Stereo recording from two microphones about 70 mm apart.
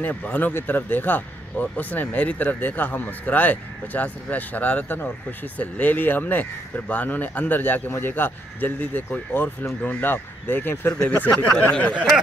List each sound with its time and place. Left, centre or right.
0.1 s speech: left
11.0 s speech: left